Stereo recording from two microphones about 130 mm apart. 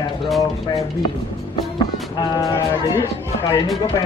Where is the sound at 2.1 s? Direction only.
30° left (ahead or behind).